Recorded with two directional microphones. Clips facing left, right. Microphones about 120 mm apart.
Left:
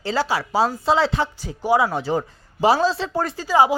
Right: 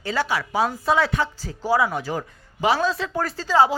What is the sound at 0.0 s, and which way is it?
Speech, 30° left (ahead or behind).